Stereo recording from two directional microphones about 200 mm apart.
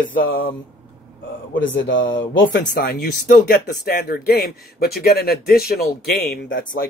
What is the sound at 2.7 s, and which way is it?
A man's voice, 50° left (ahead or behind).